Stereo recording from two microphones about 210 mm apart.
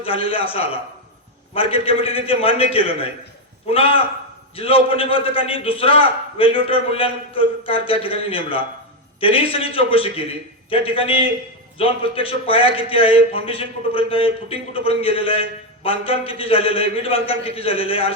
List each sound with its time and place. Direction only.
0.0 s speech: 25° left (ahead or behind)